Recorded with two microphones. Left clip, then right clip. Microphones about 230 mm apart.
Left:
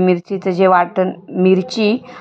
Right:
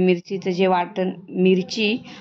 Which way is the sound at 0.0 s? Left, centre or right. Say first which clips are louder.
Left 5 dB; left.